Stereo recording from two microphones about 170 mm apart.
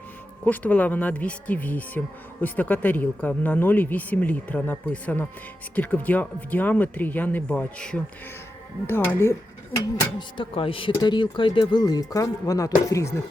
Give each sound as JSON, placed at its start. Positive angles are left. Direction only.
{"t": 0.4, "sound": "speech", "side_deg": 10}
{"t": 9.7, "sound": "speech", "side_deg": 25}